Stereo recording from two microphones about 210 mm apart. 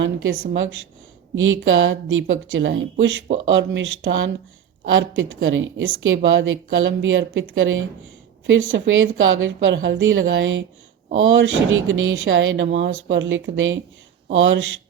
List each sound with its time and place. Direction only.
0.0 s a woman's voice: 65° right (ahead or behind)